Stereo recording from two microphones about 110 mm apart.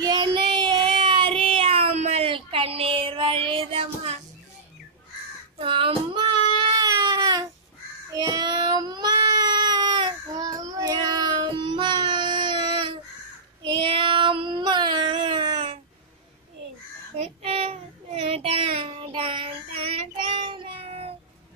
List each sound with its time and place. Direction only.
0.0 s child singing: 40° right (ahead or behind); by 2.2 s 80° right
2.2 s child singing: 55° right (ahead or behind)
5.6 s baby cry: 55° right (ahead or behind); by 7.4 s 35° right (ahead or behind)
8.1 s child singing: 40° right (ahead or behind)
10.3 s child singing: 30° right (ahead or behind); by 15.8 s 50° right (ahead or behind)
17.2 s child singing: 60° right (ahead or behind)